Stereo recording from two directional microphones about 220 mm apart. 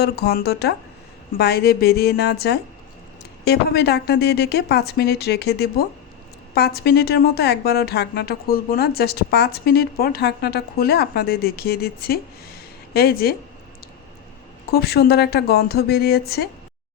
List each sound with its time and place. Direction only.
0.0 s a woman's voice: 45° left (ahead or behind)
14.7 s a woman's voice: 45° left (ahead or behind)